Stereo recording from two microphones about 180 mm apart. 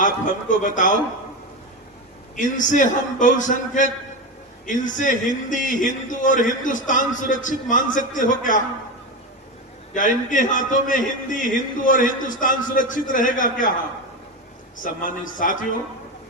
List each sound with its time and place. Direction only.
0.0 s a man's voice: 45° left (ahead or behind)
2.3 s a man's voice: 45° left (ahead or behind)
9.9 s a man's voice: 45° left (ahead or behind)
14.8 s a man's voice: 50° left (ahead or behind)